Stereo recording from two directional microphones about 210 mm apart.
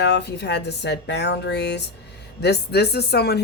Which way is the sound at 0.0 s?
55° left (ahead or behind).